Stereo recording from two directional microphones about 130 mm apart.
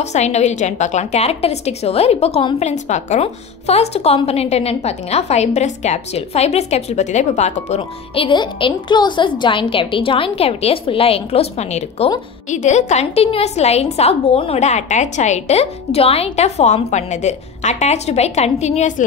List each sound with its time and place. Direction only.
0.0 s a woman's voice: 60° left (ahead or behind)
2.6 s a woman's voice: 65° left (ahead or behind)
8.1 s a woman's voice: 40° left (ahead or behind)
12.4 s a woman's voice: 65° left (ahead or behind)